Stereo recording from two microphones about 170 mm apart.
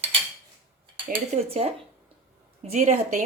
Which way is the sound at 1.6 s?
35° right (ahead or behind).